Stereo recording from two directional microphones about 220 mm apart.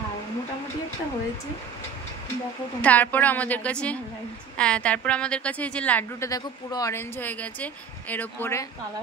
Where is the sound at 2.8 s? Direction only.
5° left (ahead or behind).